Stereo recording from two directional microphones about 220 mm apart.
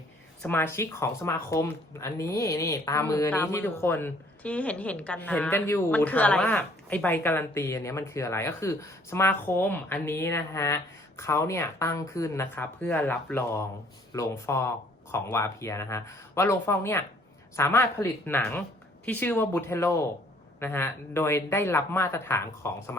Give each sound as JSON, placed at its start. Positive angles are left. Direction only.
{"t": 0.4, "sound": "speech", "side_deg": 10}